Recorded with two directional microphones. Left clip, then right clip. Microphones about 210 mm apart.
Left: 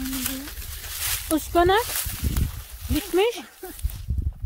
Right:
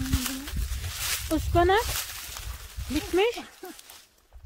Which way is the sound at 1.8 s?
40° left (ahead or behind).